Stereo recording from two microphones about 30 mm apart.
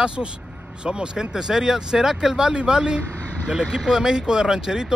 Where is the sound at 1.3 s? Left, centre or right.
Centre.